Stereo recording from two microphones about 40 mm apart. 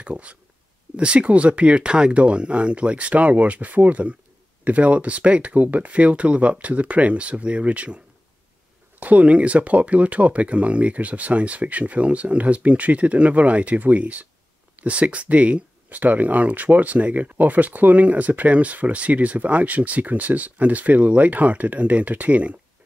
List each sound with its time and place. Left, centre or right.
0.0 s speech: right
9.0 s speech: right